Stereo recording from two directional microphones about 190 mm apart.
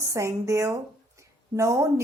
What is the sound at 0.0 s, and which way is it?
Speech, 15° right (ahead or behind).